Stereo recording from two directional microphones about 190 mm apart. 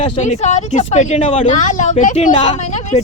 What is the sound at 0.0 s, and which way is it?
Speech, 35° left (ahead or behind).